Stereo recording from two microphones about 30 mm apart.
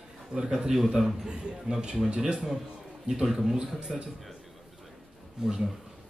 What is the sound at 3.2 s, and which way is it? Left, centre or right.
Speech, centre.